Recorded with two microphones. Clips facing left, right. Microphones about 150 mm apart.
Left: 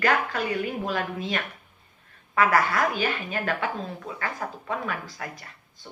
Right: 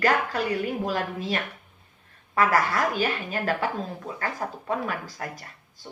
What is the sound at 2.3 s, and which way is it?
A woman's voice, 35° right (ahead or behind).